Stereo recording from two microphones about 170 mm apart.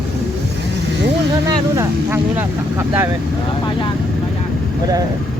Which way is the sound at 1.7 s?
15° right (ahead or behind).